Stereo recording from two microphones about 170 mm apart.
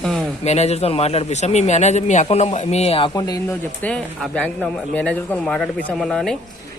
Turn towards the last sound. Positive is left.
turn(degrees=0)  # may be behind; listen again after turning